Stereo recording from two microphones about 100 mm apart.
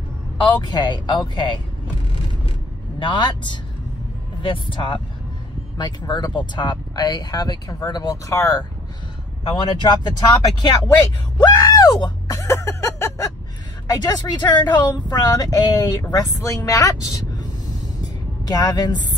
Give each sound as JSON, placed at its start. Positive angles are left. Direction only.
{"t": 0.4, "sound": "speech", "side_deg": 45}
{"t": 3.0, "sound": "speech", "side_deg": 50}
{"t": 5.8, "sound": "speech", "side_deg": 45}
{"t": 9.4, "sound": "speech", "side_deg": 60}
{"t": 11.3, "sound": "groan", "side_deg": 45}
{"t": 12.3, "sound": "a sound", "side_deg": 25}
{"t": 13.8, "sound": "speech", "side_deg": 40}
{"t": 18.5, "sound": "speech", "side_deg": 40}